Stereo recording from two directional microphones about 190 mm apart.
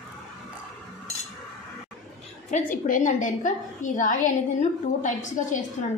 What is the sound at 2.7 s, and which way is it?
A woman's voice, 45° left (ahead or behind).